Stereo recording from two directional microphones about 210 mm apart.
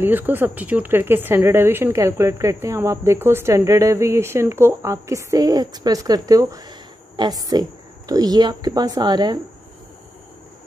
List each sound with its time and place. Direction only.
0.0 s speech: 10° right (ahead or behind)